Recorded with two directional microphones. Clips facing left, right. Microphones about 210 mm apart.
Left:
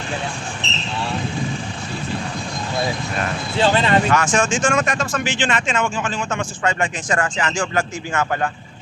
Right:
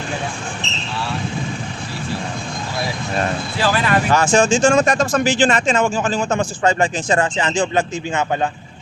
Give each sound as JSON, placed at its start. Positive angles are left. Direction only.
{"t": 3.6, "sound": "speech", "side_deg": 25}
{"t": 4.1, "sound": "speech", "side_deg": -30}